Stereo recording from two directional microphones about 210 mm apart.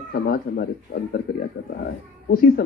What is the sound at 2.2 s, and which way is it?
Speech, 45° left (ahead or behind).